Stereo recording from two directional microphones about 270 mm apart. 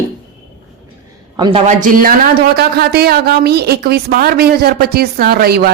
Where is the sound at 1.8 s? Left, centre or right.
Right.